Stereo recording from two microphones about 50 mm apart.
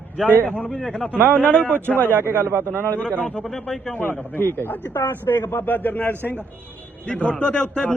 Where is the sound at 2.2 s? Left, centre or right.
Right.